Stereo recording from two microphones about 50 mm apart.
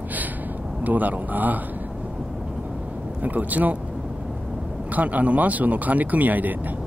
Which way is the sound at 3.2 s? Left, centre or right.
Right.